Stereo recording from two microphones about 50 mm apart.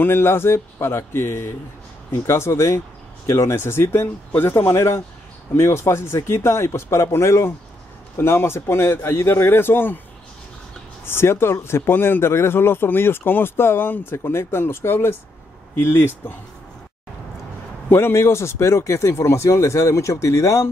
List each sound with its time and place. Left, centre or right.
0.0 s speech: left
3.3 s speech: left
11.1 s speech: left
14.1 s speech: left
17.9 s speech: left